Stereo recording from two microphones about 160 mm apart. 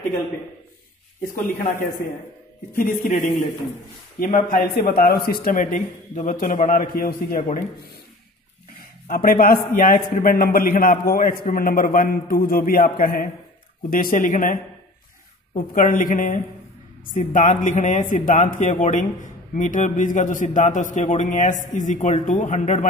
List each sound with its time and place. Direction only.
1.3 s a man's voice: 55° left (ahead or behind)
3.1 s a man's voice: 60° left (ahead or behind)
4.6 s a man's voice: 75° left (ahead or behind)
9.0 s a man's voice: 60° left (ahead or behind)
15.7 s a man's voice: 55° left (ahead or behind)